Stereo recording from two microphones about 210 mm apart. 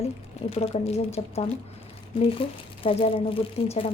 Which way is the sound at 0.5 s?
30° left (ahead or behind).